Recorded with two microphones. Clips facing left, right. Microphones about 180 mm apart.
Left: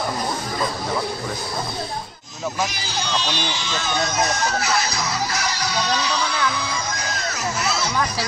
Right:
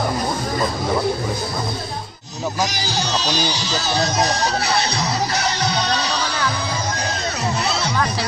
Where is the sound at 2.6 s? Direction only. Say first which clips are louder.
Right 4 dB; 35° right (ahead or behind).